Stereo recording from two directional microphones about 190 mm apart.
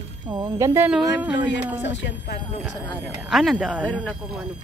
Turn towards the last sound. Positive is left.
turn(degrees=0)  # may be behind; listen again after turning